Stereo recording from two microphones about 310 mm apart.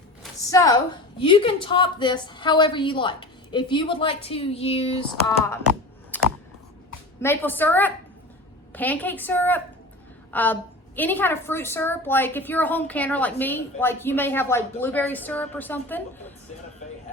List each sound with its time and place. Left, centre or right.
0.2 s a woman's voice: centre
6.1 s a sound: centre
7.2 s a woman's voice: centre